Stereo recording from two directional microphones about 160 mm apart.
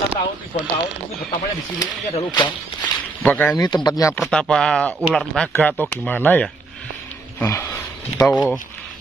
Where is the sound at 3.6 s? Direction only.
25° left (ahead or behind).